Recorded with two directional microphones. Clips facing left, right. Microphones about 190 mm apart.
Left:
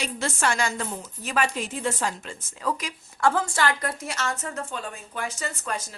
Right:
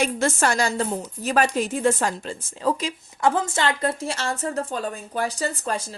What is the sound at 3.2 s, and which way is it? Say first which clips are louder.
A woman's voice: right 1 dB; 20° right (ahead or behind).